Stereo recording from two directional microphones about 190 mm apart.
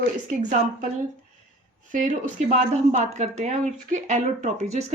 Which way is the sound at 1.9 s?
40° right (ahead or behind).